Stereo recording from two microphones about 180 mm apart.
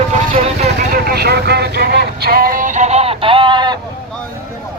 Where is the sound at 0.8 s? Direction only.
55° right (ahead or behind); by 3.8 s 25° right (ahead or behind).